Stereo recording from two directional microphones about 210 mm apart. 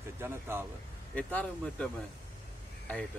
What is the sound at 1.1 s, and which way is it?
Speech, 5° left (ahead or behind).